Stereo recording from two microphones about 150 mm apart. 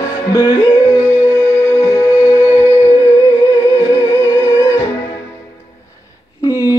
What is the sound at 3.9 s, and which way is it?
Music, 15° left (ahead or behind).